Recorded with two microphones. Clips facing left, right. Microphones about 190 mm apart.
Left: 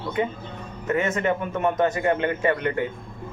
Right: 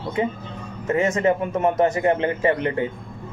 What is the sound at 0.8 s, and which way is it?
Speech, 30° right (ahead or behind).